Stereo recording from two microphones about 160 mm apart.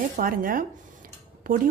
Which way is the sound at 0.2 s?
60° right (ahead or behind).